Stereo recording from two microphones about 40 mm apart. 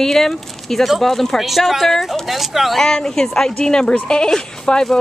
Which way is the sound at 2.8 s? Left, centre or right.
Centre.